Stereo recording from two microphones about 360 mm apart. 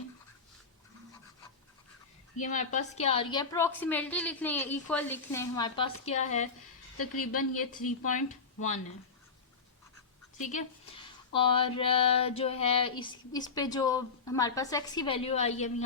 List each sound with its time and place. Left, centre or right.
2.4 s speech: centre
6.9 s a woman's voice: left
10.3 s speech: centre